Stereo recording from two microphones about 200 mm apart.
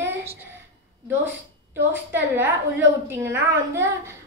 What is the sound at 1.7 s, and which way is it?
A woman's voice, 10° right (ahead or behind).